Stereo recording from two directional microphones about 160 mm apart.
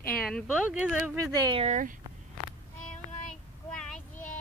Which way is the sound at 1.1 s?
25° right (ahead or behind).